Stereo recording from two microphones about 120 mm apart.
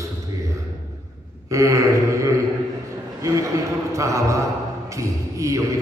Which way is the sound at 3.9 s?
25° right (ahead or behind).